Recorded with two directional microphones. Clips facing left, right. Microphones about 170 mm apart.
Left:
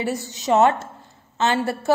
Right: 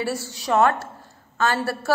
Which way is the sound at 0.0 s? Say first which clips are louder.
Left 1 dB; 20° left (ahead or behind).